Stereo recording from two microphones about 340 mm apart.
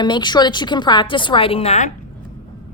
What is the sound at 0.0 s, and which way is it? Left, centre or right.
Speech, centre.